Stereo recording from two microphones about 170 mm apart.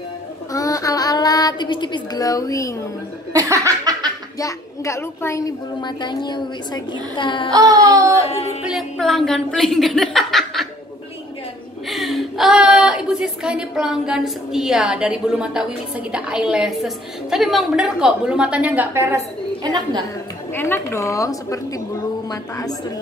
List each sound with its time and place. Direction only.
0.5 s child singing: 20° left (ahead or behind)
3.3 s laughter: 20° right (ahead or behind)
4.4 s a woman's voice: 20° left (ahead or behind)
7.5 s a sound: 20° right (ahead or behind)
8.2 s music: 40° left (ahead or behind)
8.6 s speech: centre (ahead or behind)
11.9 s a sound: centre (ahead or behind)
16.1 s a woman's voice: 5° right (ahead or behind); by 20.0 s 25° right (ahead or behind)
20.5 s a woman's voice: 15° left (ahead or behind)